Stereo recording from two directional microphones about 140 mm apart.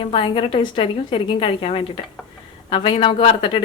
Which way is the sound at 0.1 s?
40° left (ahead or behind).